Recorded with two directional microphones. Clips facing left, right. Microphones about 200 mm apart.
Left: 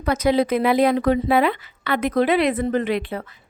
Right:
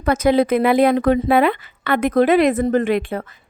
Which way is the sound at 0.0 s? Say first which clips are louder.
Right 3 dB; 50° right (ahead or behind).